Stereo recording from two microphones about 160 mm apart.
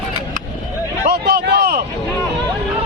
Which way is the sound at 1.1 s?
90° right.